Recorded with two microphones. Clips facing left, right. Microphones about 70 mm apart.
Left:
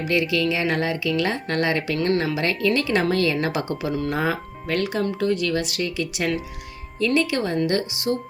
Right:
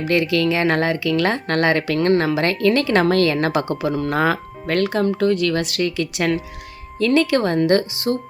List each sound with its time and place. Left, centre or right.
0.1 s speech: right
2.0 s speech: right